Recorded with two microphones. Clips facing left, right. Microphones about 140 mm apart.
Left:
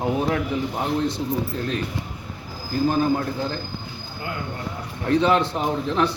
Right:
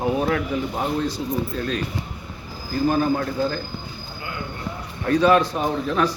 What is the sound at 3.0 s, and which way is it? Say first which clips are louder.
Speech: right 1 dB; 20° left (ahead or behind).